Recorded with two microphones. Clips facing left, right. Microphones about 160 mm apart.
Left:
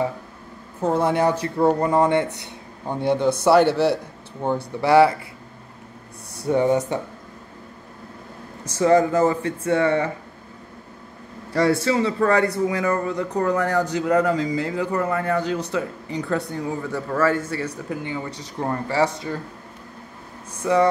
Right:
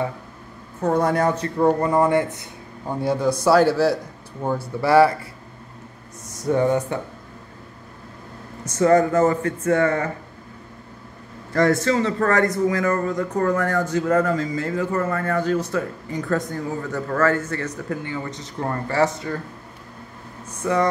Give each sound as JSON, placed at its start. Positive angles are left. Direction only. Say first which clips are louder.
{"t": 0.9, "sound": "speech", "louder": "even", "side_deg": 25}
{"t": 1.6, "sound": "a man's voice", "louder": "even", "side_deg": 20}
{"t": 6.5, "sound": "speech", "louder": "even", "side_deg": 20}
{"t": 8.7, "sound": "speech", "louder": "right 1 dB", "side_deg": 10}
{"t": 11.5, "sound": "speech", "louder": "right 1 dB", "side_deg": 10}
{"t": 20.6, "sound": "speech", "louder": "left 2 dB", "side_deg": 10}